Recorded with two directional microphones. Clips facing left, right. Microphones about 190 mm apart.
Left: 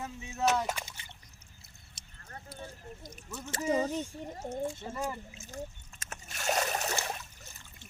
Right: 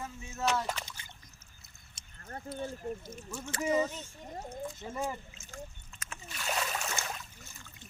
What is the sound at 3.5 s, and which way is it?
Speech, 35° left (ahead or behind).